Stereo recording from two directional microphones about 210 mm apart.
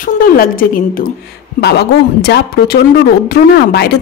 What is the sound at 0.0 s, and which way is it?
A woman's voice, 40° left (ahead or behind).